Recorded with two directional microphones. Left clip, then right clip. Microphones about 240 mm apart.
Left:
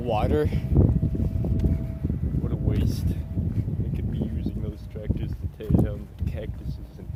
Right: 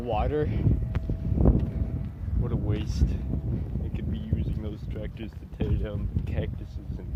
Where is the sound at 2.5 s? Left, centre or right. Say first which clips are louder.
Left 2 dB; right.